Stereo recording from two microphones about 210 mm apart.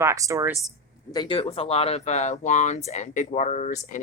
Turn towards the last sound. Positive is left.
turn(degrees=35)  # may be behind; listen again after turning